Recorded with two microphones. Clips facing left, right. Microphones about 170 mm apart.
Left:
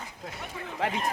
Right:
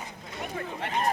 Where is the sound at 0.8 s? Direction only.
90° left.